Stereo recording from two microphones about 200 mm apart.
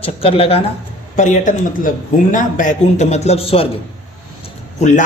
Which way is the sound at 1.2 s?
40° left (ahead or behind).